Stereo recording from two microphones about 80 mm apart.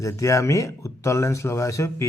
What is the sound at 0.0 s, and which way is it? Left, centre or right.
Speech, left.